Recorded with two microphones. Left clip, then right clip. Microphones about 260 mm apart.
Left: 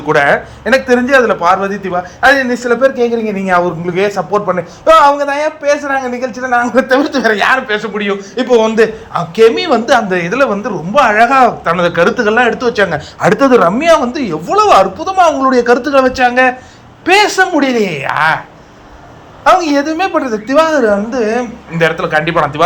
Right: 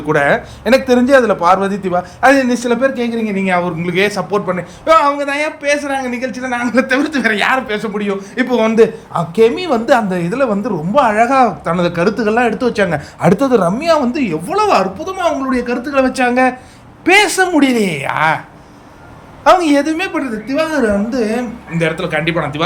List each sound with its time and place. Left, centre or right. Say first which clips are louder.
0.1 s a man's voice: left 3 dB; centre
6.7 s a man's voice: left 4 dB; centre
8.7 s a man's voice: even; right
19.5 s a man's voice: left 1 dB; centre